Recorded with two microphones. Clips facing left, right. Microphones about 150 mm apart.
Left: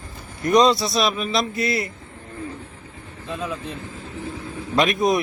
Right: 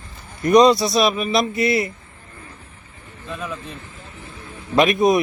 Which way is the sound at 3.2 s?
25° left (ahead or behind).